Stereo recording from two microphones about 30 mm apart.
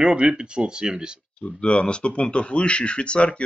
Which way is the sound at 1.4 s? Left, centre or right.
Left.